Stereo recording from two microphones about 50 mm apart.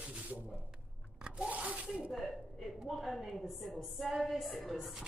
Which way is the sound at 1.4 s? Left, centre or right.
Right.